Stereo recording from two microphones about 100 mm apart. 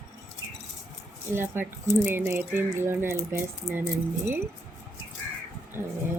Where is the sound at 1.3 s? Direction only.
20° right (ahead or behind).